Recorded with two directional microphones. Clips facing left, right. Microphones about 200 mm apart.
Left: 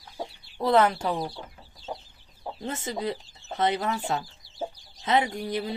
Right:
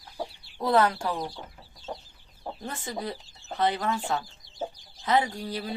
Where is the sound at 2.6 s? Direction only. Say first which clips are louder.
Left 4 dB; 25° left (ahead or behind).